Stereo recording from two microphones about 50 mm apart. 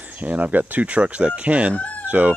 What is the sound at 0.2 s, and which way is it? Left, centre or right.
Speech, right.